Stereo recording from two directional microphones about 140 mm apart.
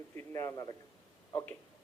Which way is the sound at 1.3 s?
15° left (ahead or behind).